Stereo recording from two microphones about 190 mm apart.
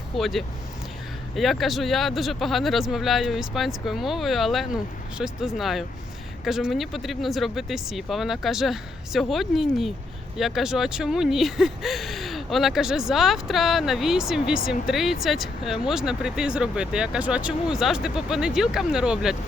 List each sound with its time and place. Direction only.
0.2 s speech: centre (ahead or behind)